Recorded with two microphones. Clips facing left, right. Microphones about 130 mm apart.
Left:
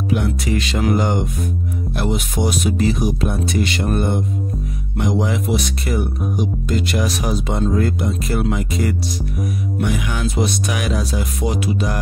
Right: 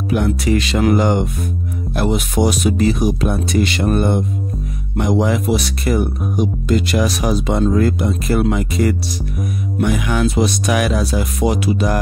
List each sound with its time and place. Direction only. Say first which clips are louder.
0.1 s speech: right 4 dB; 60° right (ahead or behind)
3.9 s speech: right 3 dB; 60° right (ahead or behind)
6.9 s speech: right 4 dB; 90° right; by 8.9 s 70° right (ahead or behind)
9.8 s speech: right 6 dB; 55° right (ahead or behind)